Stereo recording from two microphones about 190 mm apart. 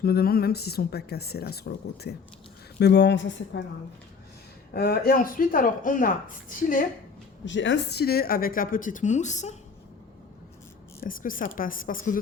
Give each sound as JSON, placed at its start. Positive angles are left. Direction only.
{"t": 0.0, "sound": "speech", "side_deg": 55}
{"t": 4.7, "sound": "speech", "side_deg": 55}
{"t": 7.4, "sound": "speech", "side_deg": 75}
{"t": 11.0, "sound": "speech", "side_deg": 45}